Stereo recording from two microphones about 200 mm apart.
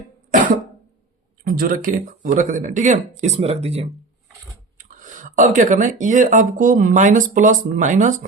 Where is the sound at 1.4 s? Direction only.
45° right (ahead or behind); by 3.9 s 30° right (ahead or behind).